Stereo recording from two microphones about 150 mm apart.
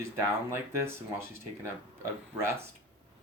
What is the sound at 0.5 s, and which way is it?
Speech, 15° right (ahead or behind).